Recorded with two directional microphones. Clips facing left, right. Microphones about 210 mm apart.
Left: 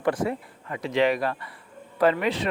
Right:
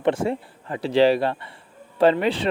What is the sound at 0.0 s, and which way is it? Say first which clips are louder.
A man's voice: right 3 dB; 25° right (ahead or behind).